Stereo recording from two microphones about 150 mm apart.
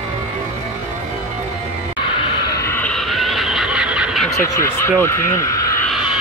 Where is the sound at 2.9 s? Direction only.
Centre (ahead or behind).